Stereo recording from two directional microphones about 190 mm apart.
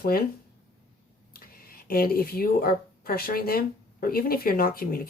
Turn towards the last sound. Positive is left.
turn(degrees=50)  # may be behind; listen again after turning